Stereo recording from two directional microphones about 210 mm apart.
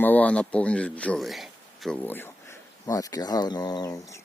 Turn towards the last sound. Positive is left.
turn(degrees=15)  # may be behind; listen again after turning